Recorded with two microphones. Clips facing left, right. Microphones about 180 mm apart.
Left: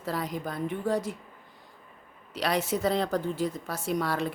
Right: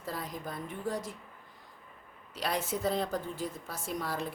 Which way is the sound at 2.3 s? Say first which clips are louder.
Left 6 dB; 80° left.